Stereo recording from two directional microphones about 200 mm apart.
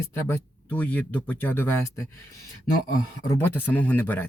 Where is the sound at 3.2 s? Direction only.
10° left (ahead or behind).